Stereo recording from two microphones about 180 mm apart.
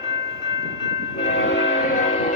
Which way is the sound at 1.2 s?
90° left.